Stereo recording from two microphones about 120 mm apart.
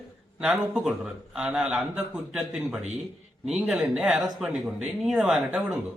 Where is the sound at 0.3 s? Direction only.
5° right (ahead or behind).